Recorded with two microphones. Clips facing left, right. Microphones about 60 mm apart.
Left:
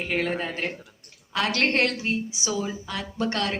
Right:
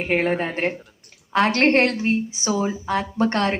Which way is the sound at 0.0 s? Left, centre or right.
Right.